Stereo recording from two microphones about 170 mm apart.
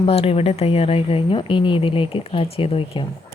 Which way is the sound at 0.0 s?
35° left (ahead or behind).